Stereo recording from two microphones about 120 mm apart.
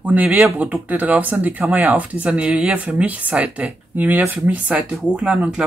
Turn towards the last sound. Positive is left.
turn(degrees=-10)  # may be behind; listen again after turning